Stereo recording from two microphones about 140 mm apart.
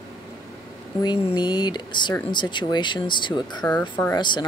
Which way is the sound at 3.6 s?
15° left (ahead or behind).